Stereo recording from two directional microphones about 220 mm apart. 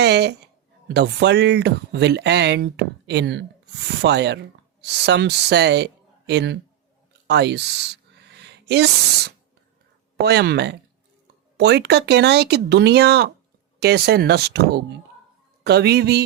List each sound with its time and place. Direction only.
0.0 s speech: 50° right (ahead or behind)